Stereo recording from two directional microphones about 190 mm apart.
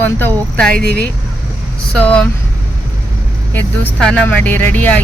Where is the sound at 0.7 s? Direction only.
55° right (ahead or behind).